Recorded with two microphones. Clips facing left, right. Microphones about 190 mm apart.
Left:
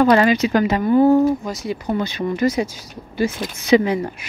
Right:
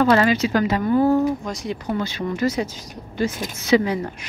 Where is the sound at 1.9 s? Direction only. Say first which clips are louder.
Left 3 dB; 15° left (ahead or behind).